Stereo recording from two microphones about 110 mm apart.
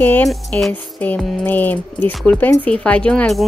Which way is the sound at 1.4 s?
15° left (ahead or behind).